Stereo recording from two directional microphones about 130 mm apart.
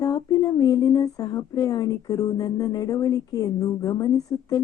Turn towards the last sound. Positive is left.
turn(degrees=25)  # may be behind; listen again after turning